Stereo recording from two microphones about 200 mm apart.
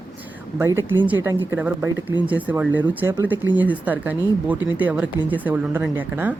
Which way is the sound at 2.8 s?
20° right (ahead or behind).